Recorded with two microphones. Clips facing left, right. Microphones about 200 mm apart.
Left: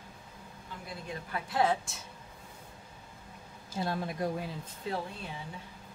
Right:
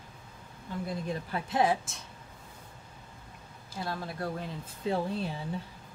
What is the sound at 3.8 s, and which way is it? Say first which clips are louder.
Speech: left 3 dB; 20° left (ahead or behind).